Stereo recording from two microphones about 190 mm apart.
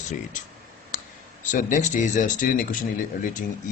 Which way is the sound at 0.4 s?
40° left (ahead or behind).